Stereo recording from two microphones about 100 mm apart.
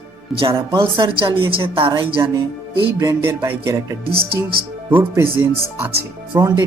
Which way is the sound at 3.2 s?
25° right (ahead or behind).